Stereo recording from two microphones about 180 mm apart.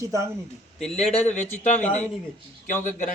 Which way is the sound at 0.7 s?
Centre (ahead or behind).